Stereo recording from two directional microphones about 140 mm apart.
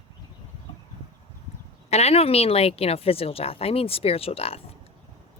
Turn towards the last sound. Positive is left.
turn(degrees=45)  # may be behind; listen again after turning